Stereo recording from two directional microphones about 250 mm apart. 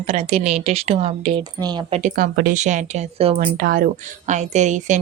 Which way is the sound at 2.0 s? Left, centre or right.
Right.